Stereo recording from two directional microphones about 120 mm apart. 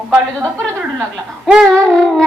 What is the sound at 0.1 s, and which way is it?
Speech, 15° right (ahead or behind).